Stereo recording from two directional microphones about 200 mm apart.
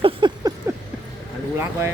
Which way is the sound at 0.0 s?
25° right (ahead or behind).